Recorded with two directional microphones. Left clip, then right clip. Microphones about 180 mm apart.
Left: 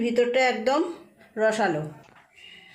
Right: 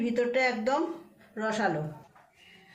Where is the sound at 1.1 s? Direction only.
45° left (ahead or behind).